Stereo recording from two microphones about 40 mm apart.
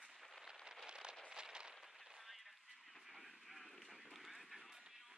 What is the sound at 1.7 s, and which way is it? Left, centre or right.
Gunshot, centre.